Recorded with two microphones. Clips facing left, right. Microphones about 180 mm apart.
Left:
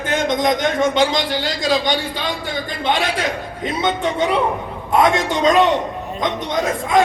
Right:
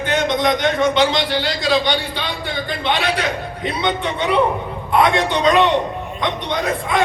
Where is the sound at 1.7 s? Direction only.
45° left (ahead or behind).